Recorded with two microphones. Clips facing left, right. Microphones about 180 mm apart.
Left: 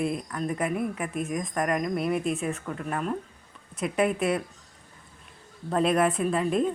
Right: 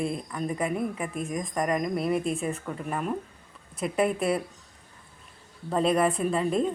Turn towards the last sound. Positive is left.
turn(degrees=0)  # may be behind; listen again after turning